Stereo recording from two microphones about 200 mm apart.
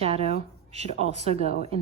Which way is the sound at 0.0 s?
30° right (ahead or behind).